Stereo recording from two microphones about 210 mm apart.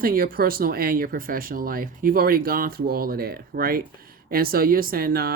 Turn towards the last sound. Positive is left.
turn(degrees=-45)  # may be behind; listen again after turning